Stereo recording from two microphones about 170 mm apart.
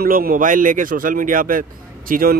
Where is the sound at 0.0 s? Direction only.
55° right (ahead or behind).